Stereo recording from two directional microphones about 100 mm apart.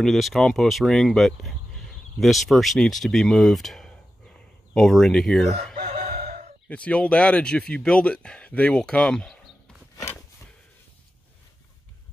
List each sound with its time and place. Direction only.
0.0 s speech: centre (ahead or behind)
6.7 s speech: 10° left (ahead or behind)